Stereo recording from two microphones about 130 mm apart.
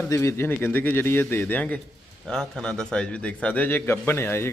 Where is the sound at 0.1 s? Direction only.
25° left (ahead or behind).